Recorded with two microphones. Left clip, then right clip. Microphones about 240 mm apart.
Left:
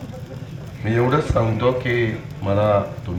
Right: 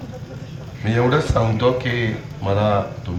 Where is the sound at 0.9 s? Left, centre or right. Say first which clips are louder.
Right 1 dB; right.